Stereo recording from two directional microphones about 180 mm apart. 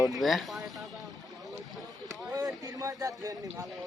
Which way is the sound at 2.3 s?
20° right (ahead or behind).